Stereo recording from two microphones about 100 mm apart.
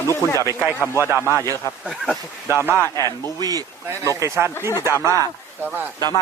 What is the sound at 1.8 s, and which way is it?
Speech, centre (ahead or behind).